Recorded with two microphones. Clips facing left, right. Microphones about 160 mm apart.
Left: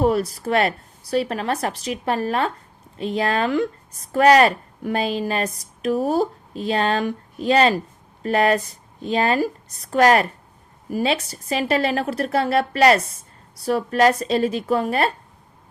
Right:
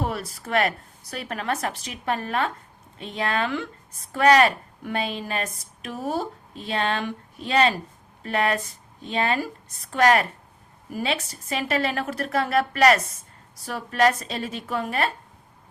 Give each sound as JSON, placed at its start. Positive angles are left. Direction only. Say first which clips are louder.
{"t": 0.0, "sound": "a woman's voice", "louder": "left 10 dB", "side_deg": 40}